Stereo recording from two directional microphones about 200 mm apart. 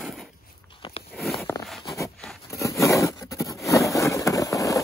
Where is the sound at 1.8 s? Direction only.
15° left (ahead or behind).